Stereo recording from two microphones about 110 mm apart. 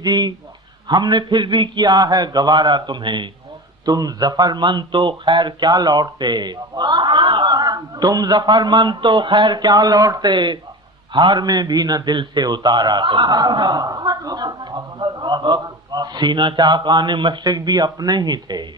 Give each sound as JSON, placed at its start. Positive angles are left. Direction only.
{"t": 0.0, "sound": "a man's voice", "side_deg": -40}